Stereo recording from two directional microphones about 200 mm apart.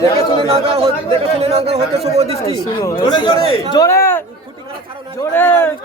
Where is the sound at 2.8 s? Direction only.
20° left (ahead or behind).